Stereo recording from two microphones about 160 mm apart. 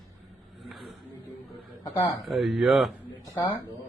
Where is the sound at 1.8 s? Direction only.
20° left (ahead or behind).